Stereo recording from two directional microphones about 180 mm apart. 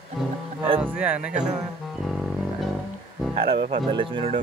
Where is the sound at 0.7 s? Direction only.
5° right (ahead or behind).